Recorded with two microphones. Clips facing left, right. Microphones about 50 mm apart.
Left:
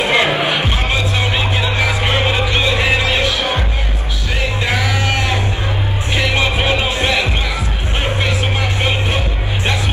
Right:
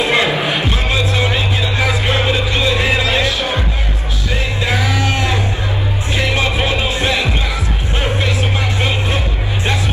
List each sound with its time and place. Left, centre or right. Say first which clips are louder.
0.0 s music: even; left
4.6 s music: right 1 dB; left
6.3 s heart sounds: left 1 dB; left
8.0 s vehicle: even; left